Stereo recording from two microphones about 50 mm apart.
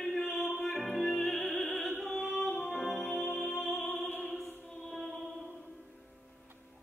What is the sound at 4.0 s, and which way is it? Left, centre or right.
Music, left.